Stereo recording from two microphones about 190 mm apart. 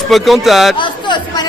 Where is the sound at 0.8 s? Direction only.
25° left (ahead or behind).